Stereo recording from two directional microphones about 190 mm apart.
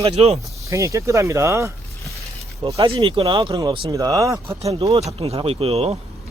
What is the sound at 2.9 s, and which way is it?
Speech, 25° right (ahead or behind).